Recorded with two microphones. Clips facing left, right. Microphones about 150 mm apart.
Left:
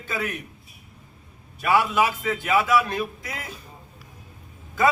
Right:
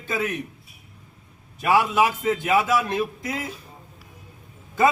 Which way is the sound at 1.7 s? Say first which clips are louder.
Right 1 dB; 15° right (ahead or behind).